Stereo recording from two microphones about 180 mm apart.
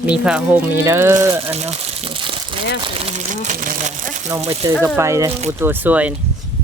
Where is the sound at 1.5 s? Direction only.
35° right (ahead or behind).